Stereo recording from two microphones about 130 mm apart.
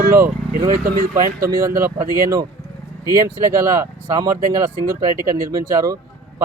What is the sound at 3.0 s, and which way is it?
Speech, 25° right (ahead or behind).